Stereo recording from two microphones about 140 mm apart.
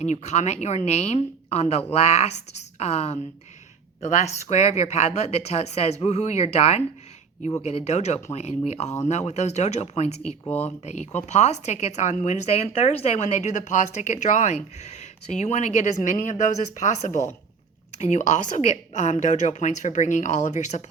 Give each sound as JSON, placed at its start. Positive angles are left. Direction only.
{"t": 0.0, "sound": "a woman's voice", "side_deg": 55}